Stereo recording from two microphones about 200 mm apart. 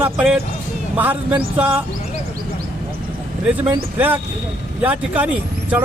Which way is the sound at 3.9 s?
10° right (ahead or behind).